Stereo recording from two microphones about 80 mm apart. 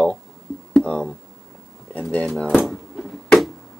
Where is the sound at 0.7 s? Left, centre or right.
Centre.